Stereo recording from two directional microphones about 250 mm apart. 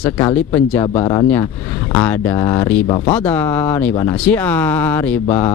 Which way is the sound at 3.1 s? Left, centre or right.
Centre.